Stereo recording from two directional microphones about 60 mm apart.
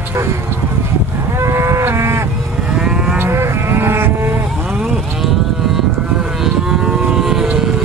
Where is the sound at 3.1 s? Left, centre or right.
Right.